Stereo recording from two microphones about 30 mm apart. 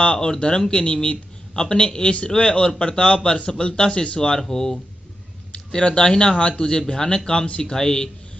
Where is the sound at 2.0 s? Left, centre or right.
Left.